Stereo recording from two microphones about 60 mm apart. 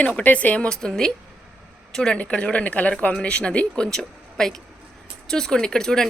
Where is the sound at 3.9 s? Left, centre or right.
Centre.